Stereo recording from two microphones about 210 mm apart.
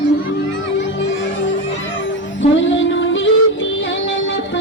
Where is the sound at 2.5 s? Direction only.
65° left (ahead or behind).